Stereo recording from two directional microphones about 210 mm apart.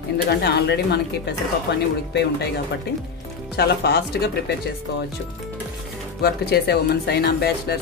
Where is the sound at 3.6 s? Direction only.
50° left (ahead or behind).